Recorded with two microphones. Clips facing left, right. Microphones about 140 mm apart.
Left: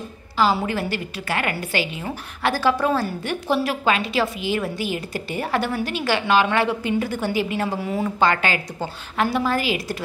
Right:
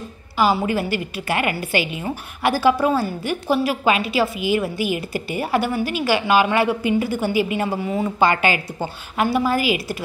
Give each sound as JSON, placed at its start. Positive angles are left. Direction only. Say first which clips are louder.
{"t": 0.7, "sound": "a woman's voice", "louder": "right 3 dB", "side_deg": -10}
{"t": 8.2, "sound": "a woman's voice", "louder": "right 3 dB", "side_deg": -10}